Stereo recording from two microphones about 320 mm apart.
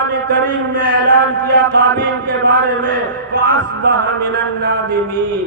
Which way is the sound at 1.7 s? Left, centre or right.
Right.